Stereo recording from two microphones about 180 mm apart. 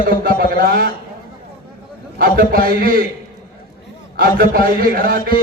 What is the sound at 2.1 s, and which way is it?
Speech, 50° right (ahead or behind).